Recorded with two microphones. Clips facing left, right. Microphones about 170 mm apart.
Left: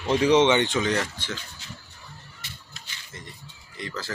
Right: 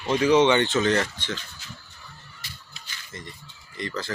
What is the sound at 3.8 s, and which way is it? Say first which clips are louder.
Speech: right 3 dB; 5° left (ahead or behind).